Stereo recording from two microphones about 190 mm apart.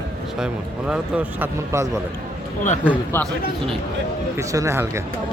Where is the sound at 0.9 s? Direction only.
10° right (ahead or behind).